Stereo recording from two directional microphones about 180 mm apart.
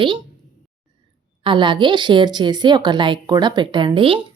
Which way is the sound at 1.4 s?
25° right (ahead or behind).